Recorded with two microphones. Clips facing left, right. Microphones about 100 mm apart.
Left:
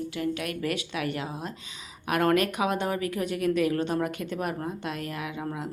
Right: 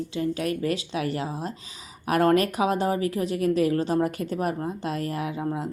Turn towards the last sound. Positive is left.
turn(degrees=-35)  # may be behind; listen again after turning